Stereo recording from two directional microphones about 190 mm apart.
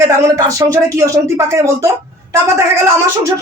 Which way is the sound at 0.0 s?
15° right (ahead or behind).